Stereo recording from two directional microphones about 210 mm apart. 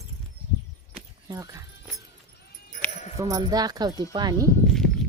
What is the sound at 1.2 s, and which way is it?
Music, 15° right (ahead or behind).